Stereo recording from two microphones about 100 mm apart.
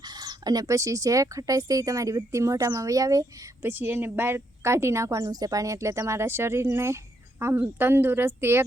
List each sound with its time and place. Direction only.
0.2 s speech: 40° right (ahead or behind)
3.6 s a woman's voice: 20° right (ahead or behind)